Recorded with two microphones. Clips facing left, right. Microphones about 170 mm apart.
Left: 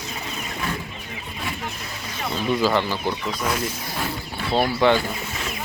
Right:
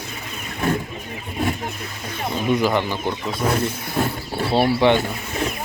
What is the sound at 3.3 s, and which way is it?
Speech, 30° right (ahead or behind).